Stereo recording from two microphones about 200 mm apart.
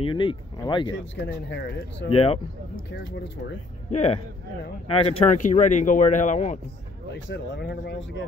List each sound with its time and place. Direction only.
0.0 s speech: 25° left (ahead or behind)
0.9 s speech: 65° left (ahead or behind)
2.0 s speech: 30° left (ahead or behind)
2.7 s speech: 65° left (ahead or behind)
3.9 s speech: 35° left (ahead or behind)
7.1 s speech: 65° left (ahead or behind)